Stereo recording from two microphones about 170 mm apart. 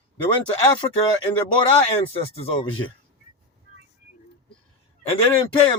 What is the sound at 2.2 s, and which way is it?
Speech, 35° left (ahead or behind).